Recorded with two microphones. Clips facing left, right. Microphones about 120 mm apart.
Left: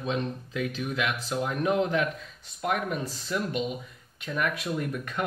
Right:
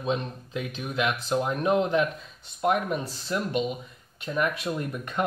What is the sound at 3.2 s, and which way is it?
Speech, 20° right (ahead or behind).